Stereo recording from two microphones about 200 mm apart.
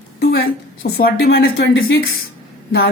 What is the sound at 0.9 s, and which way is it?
Speech, 50° left (ahead or behind).